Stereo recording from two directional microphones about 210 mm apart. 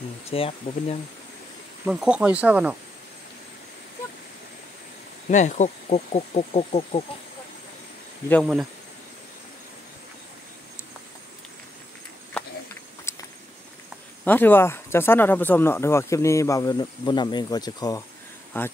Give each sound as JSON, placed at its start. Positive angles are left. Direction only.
{"t": 0.3, "sound": "speech", "side_deg": 25}
{"t": 1.9, "sound": "speech", "side_deg": -5}
{"t": 5.3, "sound": "speech", "side_deg": 35}
{"t": 13.1, "sound": "a sound", "side_deg": 10}
{"t": 14.2, "sound": "speech", "side_deg": 10}